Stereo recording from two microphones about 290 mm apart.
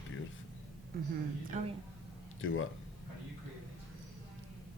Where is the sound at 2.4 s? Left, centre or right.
Left.